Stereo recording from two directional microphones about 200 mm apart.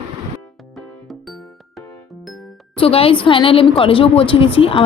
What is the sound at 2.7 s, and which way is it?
A woman's voice, 30° left (ahead or behind).